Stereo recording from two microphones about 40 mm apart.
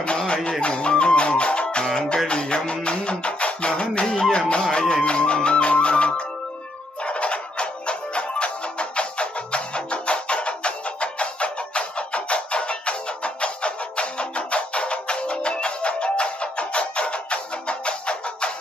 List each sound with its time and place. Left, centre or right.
0.6 s music: left